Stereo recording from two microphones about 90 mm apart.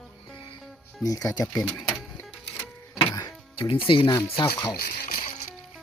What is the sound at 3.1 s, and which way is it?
Music, 45° left (ahead or behind).